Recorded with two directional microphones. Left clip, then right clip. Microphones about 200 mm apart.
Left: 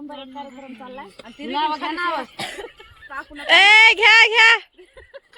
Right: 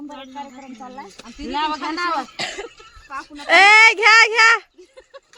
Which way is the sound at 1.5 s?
10° left (ahead or behind).